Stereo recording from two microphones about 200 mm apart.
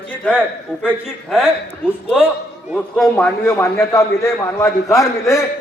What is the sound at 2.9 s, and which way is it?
A man's voice, 5° left (ahead or behind).